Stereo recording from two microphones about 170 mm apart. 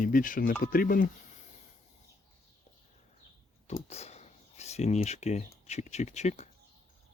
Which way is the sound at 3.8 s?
40° left (ahead or behind).